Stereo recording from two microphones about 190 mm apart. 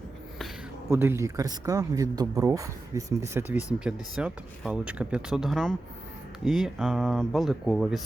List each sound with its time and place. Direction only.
0.9 s speech: 10° right (ahead or behind)